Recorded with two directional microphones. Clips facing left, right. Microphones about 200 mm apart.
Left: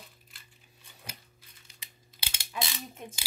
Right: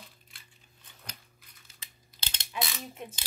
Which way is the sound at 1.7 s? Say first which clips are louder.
Left 1 dB; 10° left (ahead or behind).